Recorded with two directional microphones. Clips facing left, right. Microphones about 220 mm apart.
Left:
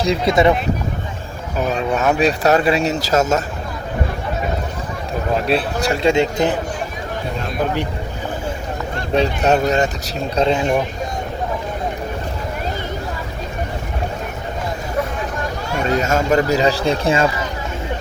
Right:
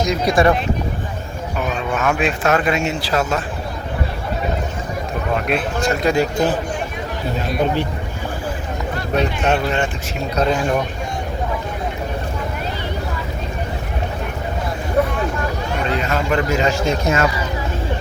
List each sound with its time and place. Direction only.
0.0 s a man's voice: 25° left (ahead or behind)
1.5 s speech: 35° left (ahead or behind)
5.3 s a man's voice: 30° left (ahead or behind)
9.1 s speech: 35° left (ahead or behind)
10.3 s a man's voice: 25° left (ahead or behind)
15.9 s speech: 45° left (ahead or behind)